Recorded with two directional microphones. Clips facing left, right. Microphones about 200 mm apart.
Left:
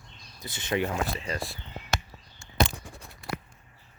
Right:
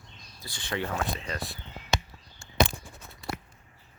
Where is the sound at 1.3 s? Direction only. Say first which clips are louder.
Left 2 dB; centre (ahead or behind).